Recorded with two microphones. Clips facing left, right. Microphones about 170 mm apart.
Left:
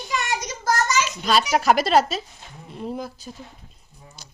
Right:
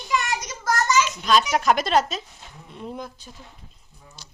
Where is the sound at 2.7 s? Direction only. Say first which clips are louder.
Left 4 dB; 35° left (ahead or behind).